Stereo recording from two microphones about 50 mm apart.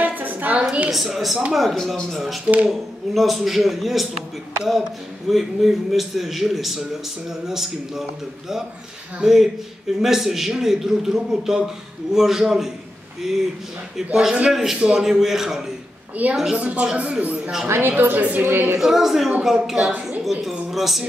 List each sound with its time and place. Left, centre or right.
0.0 s a sound: right
0.9 s a man's voice: centre
2.4 s a man's voice: right
2.7 s a man's voice: centre
5.3 s a man's voice: centre
16.2 s a woman's voice: right
17.6 s a woman's voice: right
18.4 s speech: right
18.8 s a man's voice: centre
20.7 s music: centre